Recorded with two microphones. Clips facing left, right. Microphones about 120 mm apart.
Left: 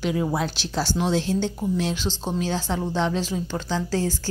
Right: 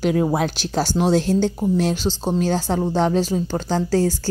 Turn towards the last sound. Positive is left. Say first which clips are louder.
# right 6 dB
turn(degrees=-40)  # may be behind; listen again after turning